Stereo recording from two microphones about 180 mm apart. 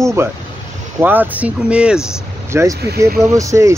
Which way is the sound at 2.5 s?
15° right (ahead or behind).